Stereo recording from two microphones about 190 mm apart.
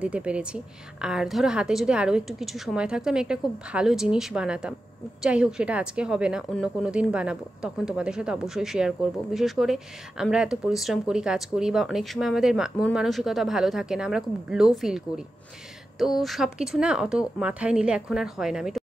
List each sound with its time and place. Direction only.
0.0 s a woman's voice: 5° right (ahead or behind)